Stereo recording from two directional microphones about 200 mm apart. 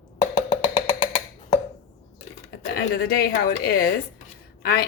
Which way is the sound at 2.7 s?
50° left (ahead or behind).